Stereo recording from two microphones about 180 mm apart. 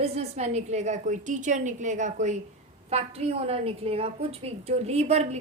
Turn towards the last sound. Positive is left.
turn(degrees=-35)  # may be behind; listen again after turning